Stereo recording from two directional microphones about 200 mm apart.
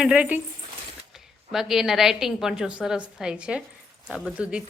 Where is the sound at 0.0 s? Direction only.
5° right (ahead or behind).